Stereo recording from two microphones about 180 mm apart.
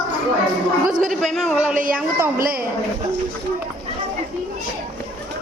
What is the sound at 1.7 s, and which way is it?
Speech, 50° right (ahead or behind).